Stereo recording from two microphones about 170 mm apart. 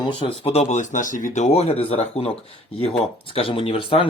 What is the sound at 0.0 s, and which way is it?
Speech, 35° left (ahead or behind).